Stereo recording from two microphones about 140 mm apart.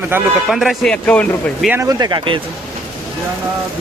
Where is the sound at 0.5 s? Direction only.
Centre (ahead or behind).